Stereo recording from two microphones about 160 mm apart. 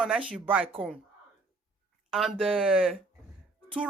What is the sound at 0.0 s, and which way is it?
Speech, 5° right (ahead or behind).